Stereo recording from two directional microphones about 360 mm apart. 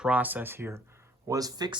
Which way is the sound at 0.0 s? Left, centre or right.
Centre.